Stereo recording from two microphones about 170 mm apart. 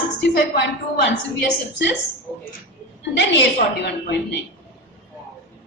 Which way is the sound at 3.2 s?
90° left.